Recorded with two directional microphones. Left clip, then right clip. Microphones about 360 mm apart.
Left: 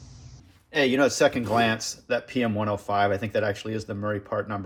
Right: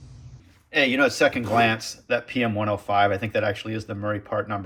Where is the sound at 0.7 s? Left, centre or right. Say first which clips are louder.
Right 2 dB; centre.